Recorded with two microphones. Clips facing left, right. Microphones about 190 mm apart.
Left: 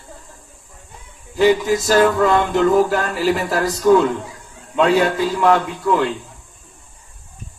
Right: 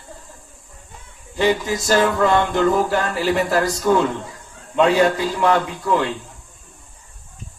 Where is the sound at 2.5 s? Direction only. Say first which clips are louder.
Left 3 dB; centre (ahead or behind).